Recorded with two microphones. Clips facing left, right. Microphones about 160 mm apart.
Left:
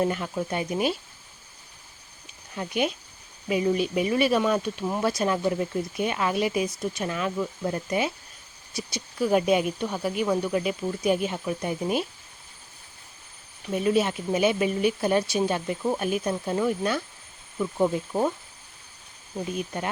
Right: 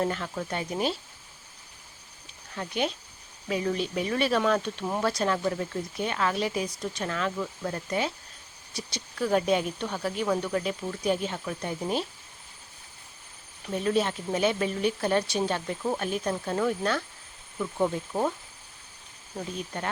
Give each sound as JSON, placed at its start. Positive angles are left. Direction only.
{"t": 0.0, "sound": "speech", "side_deg": 15}
{"t": 2.6, "sound": "speech", "side_deg": 15}
{"t": 13.7, "sound": "speech", "side_deg": 10}
{"t": 19.5, "sound": "speech", "side_deg": 15}